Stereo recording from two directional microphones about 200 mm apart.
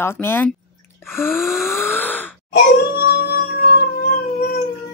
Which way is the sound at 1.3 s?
Centre (ahead or behind).